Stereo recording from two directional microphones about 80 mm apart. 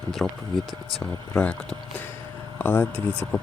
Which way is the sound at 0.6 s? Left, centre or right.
Right.